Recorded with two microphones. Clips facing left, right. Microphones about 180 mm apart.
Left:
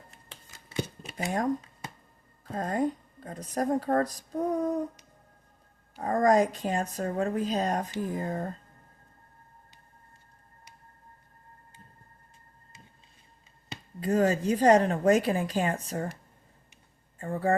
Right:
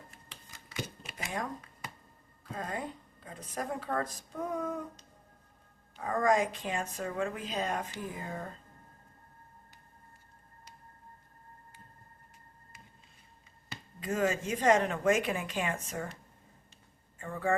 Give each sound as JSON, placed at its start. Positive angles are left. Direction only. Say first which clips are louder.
{"t": 0.7, "sound": "a sound", "louder": "left 7 dB", "side_deg": 30}
{"t": 2.4, "sound": "a woman's voice", "louder": "left 9 dB", "side_deg": 45}
{"t": 6.0, "sound": "a woman's voice", "louder": "left 5 dB", "side_deg": 40}
{"t": 14.0, "sound": "a woman's voice", "louder": "left 6 dB", "side_deg": 35}
{"t": 17.2, "sound": "a woman's voice", "louder": "left 5 dB", "side_deg": 35}